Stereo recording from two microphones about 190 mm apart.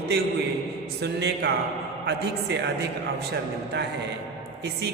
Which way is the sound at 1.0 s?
60° right (ahead or behind).